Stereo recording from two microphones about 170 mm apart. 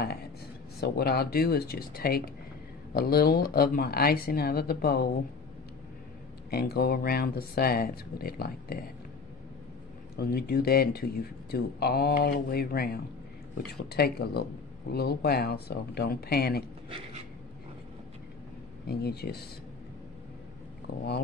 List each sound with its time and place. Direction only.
0.7 s speech: 70° left (ahead or behind)
6.5 s speech: 65° left (ahead or behind)
10.1 s speech: 70° left (ahead or behind)
18.9 s speech: 70° left (ahead or behind)